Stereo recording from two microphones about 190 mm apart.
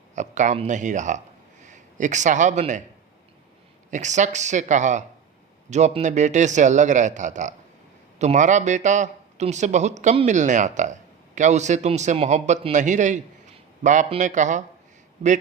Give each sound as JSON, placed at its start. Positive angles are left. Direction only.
{"t": 0.2, "sound": "a man's voice", "side_deg": -40}
{"t": 3.9, "sound": "speech", "side_deg": -40}